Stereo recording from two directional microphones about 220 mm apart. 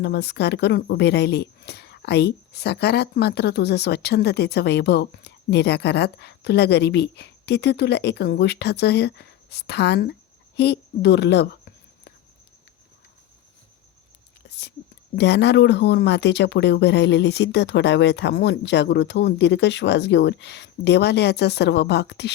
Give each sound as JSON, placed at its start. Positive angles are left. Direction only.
{"t": 0.0, "sound": "a woman's voice", "side_deg": 50}
{"t": 14.4, "sound": "whispering", "side_deg": 50}
{"t": 15.1, "sound": "a woman's voice", "side_deg": 50}